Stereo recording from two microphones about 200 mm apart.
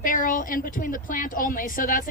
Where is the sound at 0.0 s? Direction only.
40° left (ahead or behind).